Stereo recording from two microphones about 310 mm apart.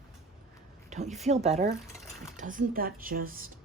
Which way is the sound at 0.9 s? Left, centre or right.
Right.